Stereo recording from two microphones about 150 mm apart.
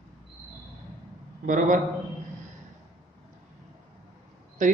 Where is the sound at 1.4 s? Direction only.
60° right (ahead or behind).